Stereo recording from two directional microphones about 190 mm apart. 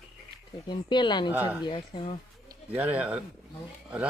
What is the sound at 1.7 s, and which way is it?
Speech, 30° left (ahead or behind).